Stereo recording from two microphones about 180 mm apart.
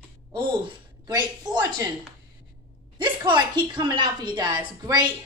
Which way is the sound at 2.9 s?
25° right (ahead or behind).